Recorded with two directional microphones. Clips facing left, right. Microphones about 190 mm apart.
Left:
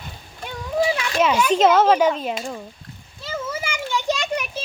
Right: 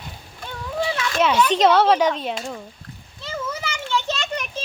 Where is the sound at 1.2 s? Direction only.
10° left (ahead or behind).